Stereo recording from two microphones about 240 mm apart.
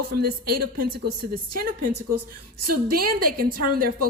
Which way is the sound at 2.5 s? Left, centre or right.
Right.